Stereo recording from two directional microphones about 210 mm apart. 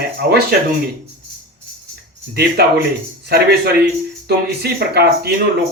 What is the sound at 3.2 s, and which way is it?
A man's voice, 50° right (ahead or behind).